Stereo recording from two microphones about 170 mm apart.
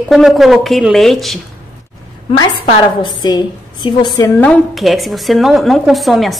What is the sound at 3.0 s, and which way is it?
A woman's voice, 25° left (ahead or behind).